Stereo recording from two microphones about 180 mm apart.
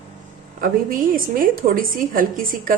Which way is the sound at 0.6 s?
50° right (ahead or behind).